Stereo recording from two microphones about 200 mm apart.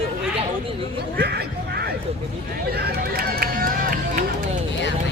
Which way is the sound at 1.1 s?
55° right (ahead or behind).